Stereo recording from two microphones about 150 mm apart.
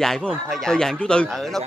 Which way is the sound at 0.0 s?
5° left (ahead or behind).